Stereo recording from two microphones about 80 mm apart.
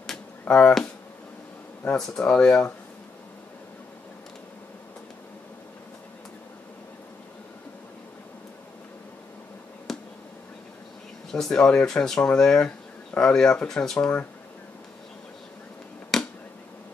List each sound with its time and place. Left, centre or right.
0.5 s speech: centre
2.0 s speech: centre
9.9 s a sound: centre
11.3 s speech: centre
16.1 s finger snapping: centre